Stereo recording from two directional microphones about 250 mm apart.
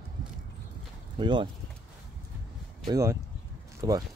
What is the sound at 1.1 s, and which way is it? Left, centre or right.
Speech, centre.